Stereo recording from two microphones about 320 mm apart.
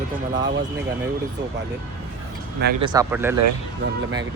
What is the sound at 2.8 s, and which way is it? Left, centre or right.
Speech, centre.